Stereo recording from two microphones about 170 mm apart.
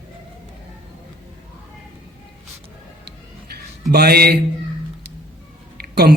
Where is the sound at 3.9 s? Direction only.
65° right (ahead or behind).